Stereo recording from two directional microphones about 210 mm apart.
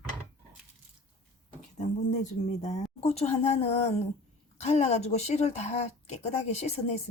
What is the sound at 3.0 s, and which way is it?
A woman's voice, 30° left (ahead or behind).